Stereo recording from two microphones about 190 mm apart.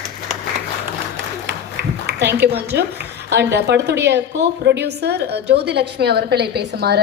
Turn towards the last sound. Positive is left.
turn(degrees=-60)  # may be behind; listen again after turning